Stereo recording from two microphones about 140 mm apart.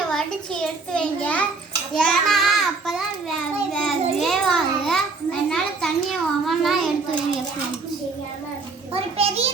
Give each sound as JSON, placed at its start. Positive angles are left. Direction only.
{"t": 0.1, "sound": "a child's voice", "side_deg": 5}
{"t": 2.0, "sound": "child singing", "side_deg": 0}
{"t": 8.9, "sound": "a sound", "side_deg": -45}